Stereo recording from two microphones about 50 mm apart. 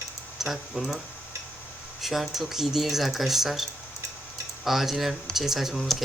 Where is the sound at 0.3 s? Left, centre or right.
Centre.